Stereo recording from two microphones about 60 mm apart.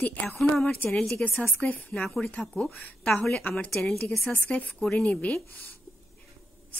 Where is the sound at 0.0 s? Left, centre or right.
Left.